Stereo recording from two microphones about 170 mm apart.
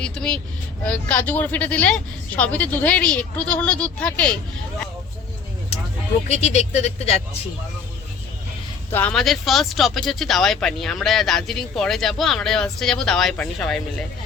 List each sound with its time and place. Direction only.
0.0 s speech: 5° left (ahead or behind)
6.2 s speech: 40° left (ahead or behind)
8.9 s speech: 10° left (ahead or behind)
9.1 s speech: centre (ahead or behind)